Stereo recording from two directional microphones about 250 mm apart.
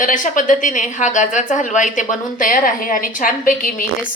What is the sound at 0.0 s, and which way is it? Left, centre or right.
A woman's voice, left.